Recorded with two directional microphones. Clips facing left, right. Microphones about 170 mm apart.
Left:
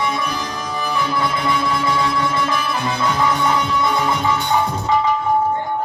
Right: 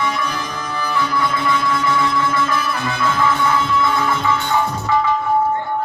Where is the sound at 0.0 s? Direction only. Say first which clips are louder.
Even; 15° left (ahead or behind).